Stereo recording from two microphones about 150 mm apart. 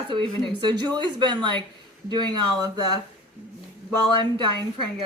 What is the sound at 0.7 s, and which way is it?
Speech, 30° right (ahead or behind).